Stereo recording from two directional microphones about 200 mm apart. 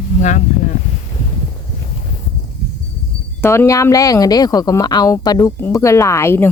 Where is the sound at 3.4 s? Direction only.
15° left (ahead or behind).